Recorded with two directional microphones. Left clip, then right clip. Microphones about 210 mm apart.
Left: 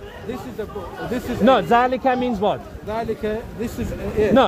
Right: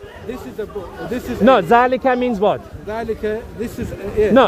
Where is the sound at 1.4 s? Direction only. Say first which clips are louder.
Right 4 dB; 55° right (ahead or behind).